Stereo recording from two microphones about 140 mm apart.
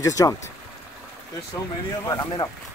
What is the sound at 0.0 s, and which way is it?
Speech, 25° left (ahead or behind).